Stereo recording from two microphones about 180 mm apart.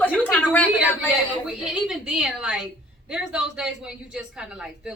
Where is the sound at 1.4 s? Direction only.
5° right (ahead or behind).